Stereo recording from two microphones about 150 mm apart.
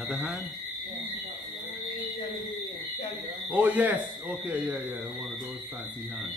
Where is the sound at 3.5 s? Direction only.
10° right (ahead or behind).